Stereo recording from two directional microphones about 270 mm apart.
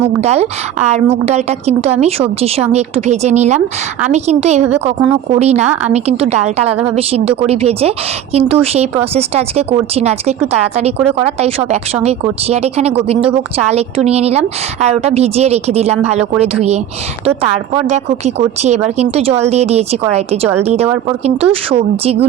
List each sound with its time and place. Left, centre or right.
0.2 s speech: right
17.2 s speech: right
21.7 s speech: right